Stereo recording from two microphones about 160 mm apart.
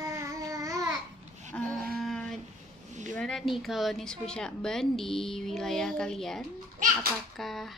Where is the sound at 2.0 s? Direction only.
5° left (ahead or behind).